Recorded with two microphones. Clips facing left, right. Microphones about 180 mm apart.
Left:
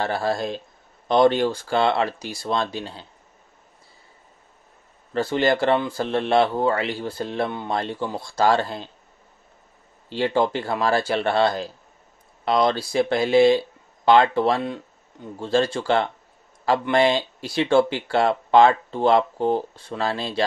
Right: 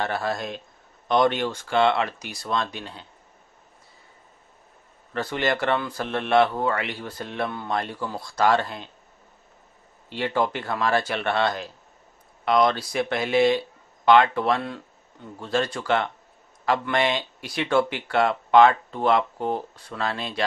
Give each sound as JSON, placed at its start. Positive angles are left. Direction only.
{"t": 0.0, "sound": "speech", "side_deg": 30}
{"t": 5.1, "sound": "speech", "side_deg": 30}
{"t": 10.0, "sound": "speech", "side_deg": 30}